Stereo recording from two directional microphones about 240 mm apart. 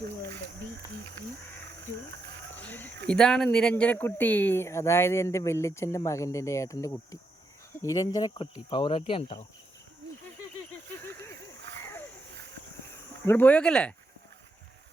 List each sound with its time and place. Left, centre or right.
2.6 s a sound: centre
3.1 s speech: centre; by 9.5 s left
13.2 s speech: centre